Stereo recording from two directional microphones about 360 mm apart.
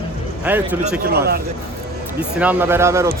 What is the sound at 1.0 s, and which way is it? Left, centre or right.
Speech, right.